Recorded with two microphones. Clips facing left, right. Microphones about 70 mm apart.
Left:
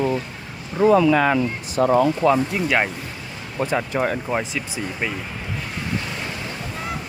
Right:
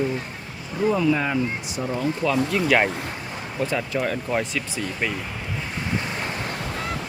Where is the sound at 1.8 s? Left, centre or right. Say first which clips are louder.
Left 12 dB; left.